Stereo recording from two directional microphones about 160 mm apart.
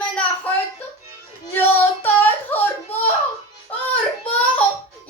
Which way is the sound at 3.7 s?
10° left (ahead or behind).